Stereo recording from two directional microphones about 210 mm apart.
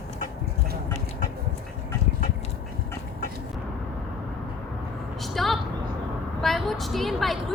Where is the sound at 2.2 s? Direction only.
30° left (ahead or behind).